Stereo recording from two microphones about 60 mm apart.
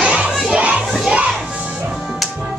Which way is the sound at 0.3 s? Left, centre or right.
Centre.